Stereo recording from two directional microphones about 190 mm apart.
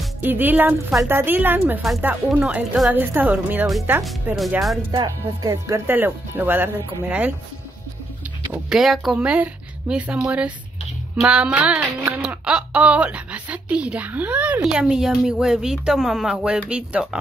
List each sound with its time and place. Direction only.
0.2 s speech: 10° right (ahead or behind)
4.9 s speech: 20° right (ahead or behind)
8.6 s speech: centre (ahead or behind)